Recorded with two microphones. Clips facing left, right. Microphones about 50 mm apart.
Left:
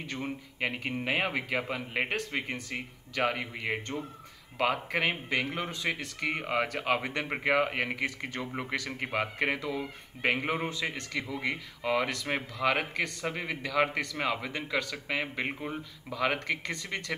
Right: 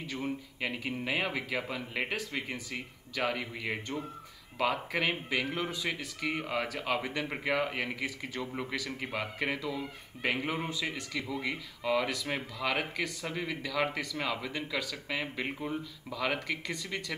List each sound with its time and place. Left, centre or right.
0.2 s speech: left
7.0 s speech: centre
7.2 s speech: left